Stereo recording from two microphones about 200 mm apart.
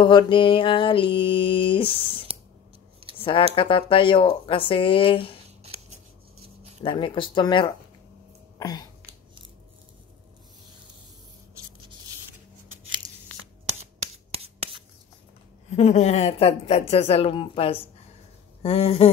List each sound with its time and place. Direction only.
0.0 s mantra: 25° left (ahead or behind)
3.2 s a sound: 25° left (ahead or behind)
3.5 s mantra: 25° left (ahead or behind)
6.8 s mantra: 25° left (ahead or behind)
8.5 s a sound: 20° left (ahead or behind)
14.3 s rub: 30° right (ahead or behind)
15.7 s speech: 35° left (ahead or behind)
18.6 s mantra: 30° left (ahead or behind)